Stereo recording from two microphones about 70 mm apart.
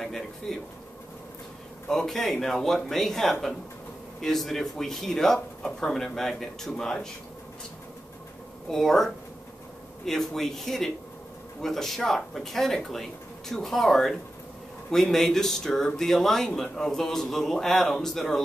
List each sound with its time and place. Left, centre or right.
0.0 s a man's voice: centre
1.9 s speech: centre
8.6 s speech: centre